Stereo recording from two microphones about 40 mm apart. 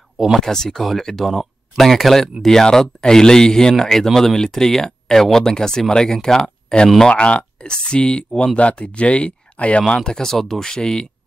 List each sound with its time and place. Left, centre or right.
0.4 s speech: centre
7.1 s speech: left
9.8 s speech: centre